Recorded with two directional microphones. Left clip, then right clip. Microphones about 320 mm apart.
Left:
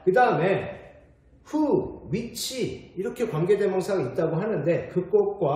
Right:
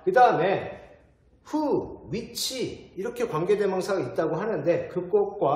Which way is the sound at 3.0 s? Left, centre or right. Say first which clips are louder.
Even; centre.